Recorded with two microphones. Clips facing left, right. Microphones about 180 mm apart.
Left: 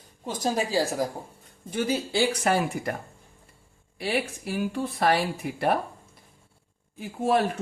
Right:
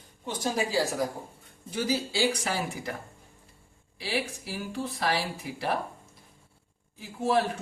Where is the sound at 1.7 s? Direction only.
55° left (ahead or behind).